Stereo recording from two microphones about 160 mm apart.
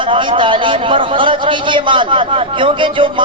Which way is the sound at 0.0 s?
30° right (ahead or behind).